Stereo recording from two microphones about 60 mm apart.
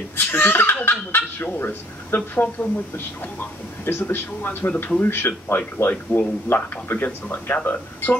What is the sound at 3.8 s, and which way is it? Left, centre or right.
Speech, left.